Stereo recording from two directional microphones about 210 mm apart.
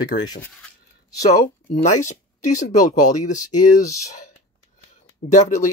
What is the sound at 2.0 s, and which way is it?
Speech, 35° left (ahead or behind).